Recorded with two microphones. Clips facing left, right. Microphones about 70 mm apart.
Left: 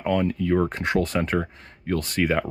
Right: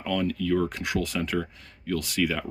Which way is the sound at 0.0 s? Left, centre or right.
Left.